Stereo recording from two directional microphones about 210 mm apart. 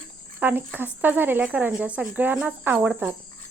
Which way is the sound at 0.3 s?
10° right (ahead or behind).